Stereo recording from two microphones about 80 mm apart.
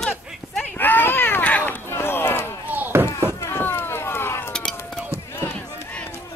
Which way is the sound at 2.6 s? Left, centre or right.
Right.